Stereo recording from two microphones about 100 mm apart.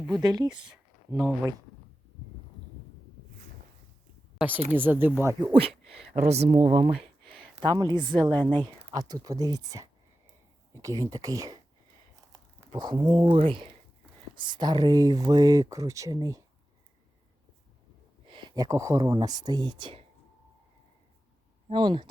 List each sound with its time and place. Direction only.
0.2 s speech: 40° right (ahead or behind)
0.6 s a sound: 5° right (ahead or behind)
4.7 s speech: 20° right (ahead or behind)
5.5 s a sound: 75° right (ahead or behind)
6.1 s speech: 90° right; by 7.3 s 75° right (ahead or behind)
7.6 s speech: 40° right (ahead or behind)
7.9 s a woman's voice: 15° left (ahead or behind)
8.6 s speech: 40° right (ahead or behind)
12.7 s speech: 50° right (ahead or behind)
13.3 s speech: 65° right (ahead or behind)
14.3 s speech: 50° right (ahead or behind)
18.3 s speech: 50° right (ahead or behind)
21.7 s speech: 55° right (ahead or behind)